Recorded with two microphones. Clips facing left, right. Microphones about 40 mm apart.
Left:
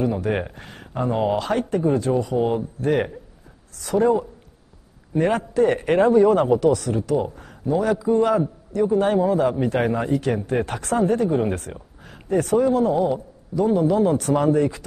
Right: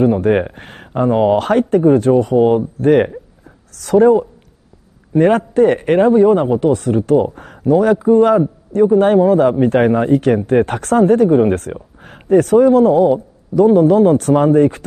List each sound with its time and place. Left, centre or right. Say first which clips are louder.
0.0 s a man's voice: right 10 dB; right
1.4 s a man's voice: right 9 dB; right
3.7 s a woman's voice: right 9 dB; right
5.1 s speech: right 8 dB; right
6.7 s speech: right 8 dB; right
7.3 s a sound: right 10 dB; right
7.7 s a man's voice: right 8 dB; right